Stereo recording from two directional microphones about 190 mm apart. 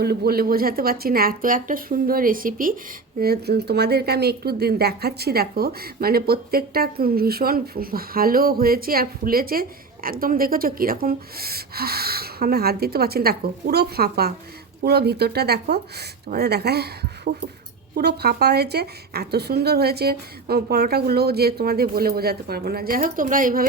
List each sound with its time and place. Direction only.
0.0 s a woman's voice: 55° right (ahead or behind)